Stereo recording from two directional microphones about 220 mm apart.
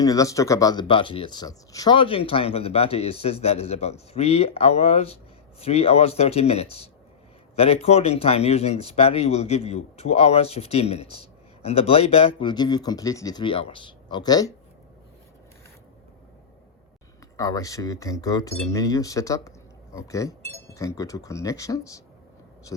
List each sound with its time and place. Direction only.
0.0 s speech: 15° left (ahead or behind)
17.3 s speech: 15° left (ahead or behind)